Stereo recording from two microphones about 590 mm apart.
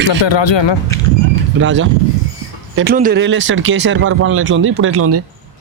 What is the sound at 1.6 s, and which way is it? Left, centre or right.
Speech, centre.